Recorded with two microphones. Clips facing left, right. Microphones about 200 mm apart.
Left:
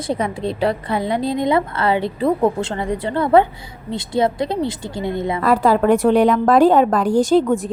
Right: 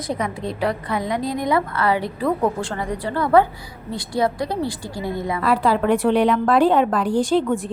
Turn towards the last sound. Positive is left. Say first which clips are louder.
# left 4 dB
turn(degrees=40)  # may be behind; listen again after turning